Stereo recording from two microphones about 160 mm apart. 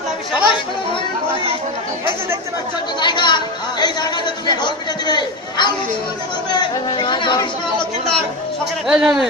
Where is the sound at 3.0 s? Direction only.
30° left (ahead or behind).